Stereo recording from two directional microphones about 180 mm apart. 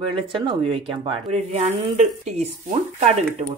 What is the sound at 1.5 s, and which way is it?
Speech, 40° right (ahead or behind).